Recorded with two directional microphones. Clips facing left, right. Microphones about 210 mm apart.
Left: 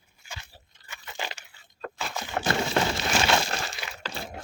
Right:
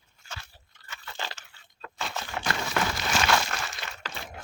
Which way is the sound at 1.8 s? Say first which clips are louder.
Left 8 dB; 50° left (ahead or behind).